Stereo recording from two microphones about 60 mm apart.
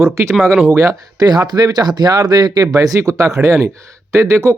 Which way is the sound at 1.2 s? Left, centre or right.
Right.